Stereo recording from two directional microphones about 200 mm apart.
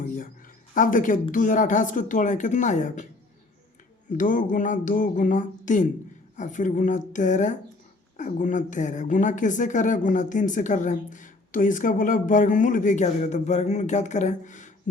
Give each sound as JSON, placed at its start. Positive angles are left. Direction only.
{"t": 0.7, "sound": "speech", "side_deg": 40}
{"t": 4.2, "sound": "speech", "side_deg": 40}